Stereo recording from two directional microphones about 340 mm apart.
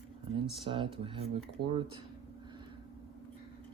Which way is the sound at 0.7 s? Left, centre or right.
Centre.